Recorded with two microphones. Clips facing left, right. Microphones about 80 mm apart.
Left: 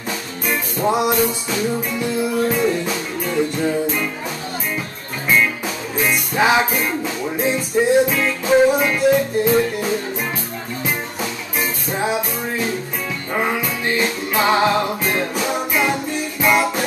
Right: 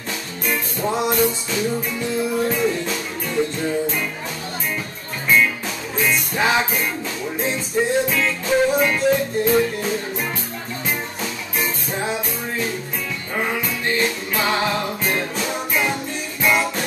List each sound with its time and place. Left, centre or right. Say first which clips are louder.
0.5 s music: left 4 dB; centre
5.9 s music: left 2 dB; centre
11.6 s music: left 3 dB; centre